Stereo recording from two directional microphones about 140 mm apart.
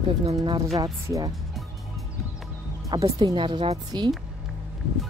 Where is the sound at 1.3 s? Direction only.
Centre (ahead or behind).